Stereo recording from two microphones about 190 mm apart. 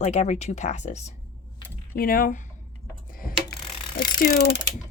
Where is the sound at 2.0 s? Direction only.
50° left (ahead or behind).